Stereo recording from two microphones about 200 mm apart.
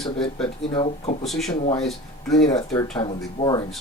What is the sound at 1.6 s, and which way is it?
Speech, 25° left (ahead or behind).